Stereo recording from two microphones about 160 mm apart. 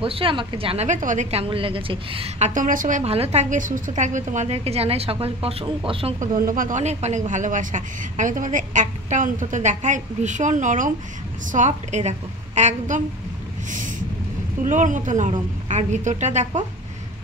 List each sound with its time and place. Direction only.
0.0 s a woman's voice: 35° right (ahead or behind)
0.8 s speech: 50° right (ahead or behind)
3.0 s a woman's voice: 40° right (ahead or behind)
6.1 s speech: 55° right (ahead or behind)
13.7 s a sound: 50° right (ahead or behind)
14.6 s speech: 55° right (ahead or behind)